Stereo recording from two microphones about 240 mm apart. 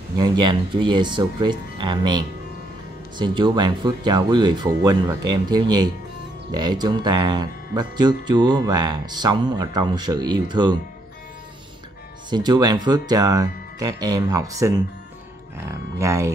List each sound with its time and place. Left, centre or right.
0.2 s speech: centre
12.3 s speech: centre